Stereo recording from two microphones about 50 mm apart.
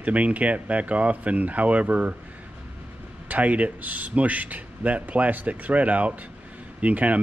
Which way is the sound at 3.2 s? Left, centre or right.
Right.